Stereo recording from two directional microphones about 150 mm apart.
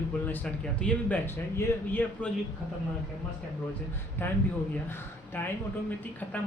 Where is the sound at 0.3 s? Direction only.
10° left (ahead or behind).